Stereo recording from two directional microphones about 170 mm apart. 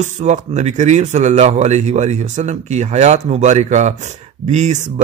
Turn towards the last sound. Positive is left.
turn(degrees=-45)  # may be behind; listen again after turning